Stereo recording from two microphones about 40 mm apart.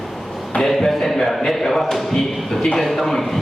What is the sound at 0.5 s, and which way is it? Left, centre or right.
A man's voice, centre.